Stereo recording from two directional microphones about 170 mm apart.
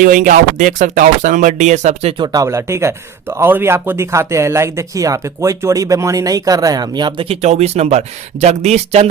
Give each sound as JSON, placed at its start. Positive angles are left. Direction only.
{"t": 0.0, "sound": "speech", "side_deg": -50}
{"t": 2.2, "sound": "speech", "side_deg": -20}